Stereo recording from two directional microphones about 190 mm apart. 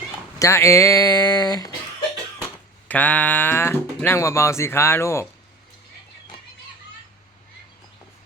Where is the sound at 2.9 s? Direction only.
10° left (ahead or behind).